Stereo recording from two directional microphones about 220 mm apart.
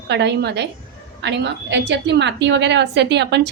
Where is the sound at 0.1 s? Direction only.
50° right (ahead or behind).